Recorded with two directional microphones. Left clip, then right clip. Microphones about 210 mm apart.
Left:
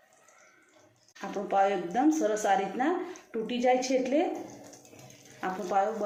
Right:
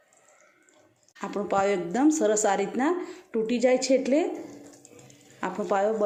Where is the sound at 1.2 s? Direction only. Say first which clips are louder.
Right 1 dB; 50° right (ahead or behind).